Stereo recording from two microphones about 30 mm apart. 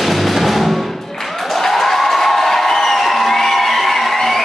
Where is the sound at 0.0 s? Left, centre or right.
Centre.